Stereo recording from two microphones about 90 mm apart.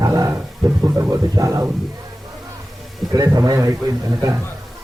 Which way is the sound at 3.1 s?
40° right (ahead or behind).